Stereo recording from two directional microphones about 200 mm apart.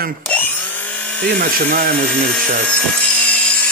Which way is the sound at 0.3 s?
10° left (ahead or behind).